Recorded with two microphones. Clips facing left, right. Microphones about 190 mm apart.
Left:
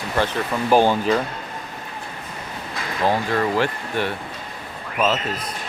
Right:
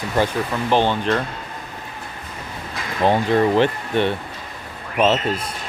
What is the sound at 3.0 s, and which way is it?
Speech, 20° right (ahead or behind).